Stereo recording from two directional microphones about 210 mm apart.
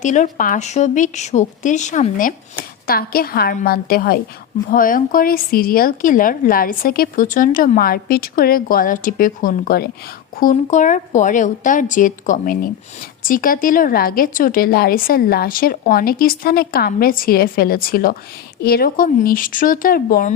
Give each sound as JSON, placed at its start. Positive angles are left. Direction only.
{"t": 0.0, "sound": "a woman's voice", "side_deg": 35}